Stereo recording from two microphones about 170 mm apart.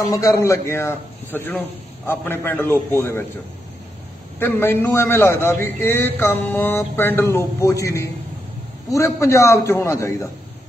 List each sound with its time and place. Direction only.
0.0 s a man's voice: 20° left (ahead or behind)
4.4 s a man's voice: 15° left (ahead or behind)